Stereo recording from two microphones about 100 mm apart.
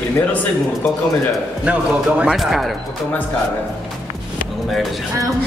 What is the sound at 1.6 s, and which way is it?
Speech, 10° right (ahead or behind).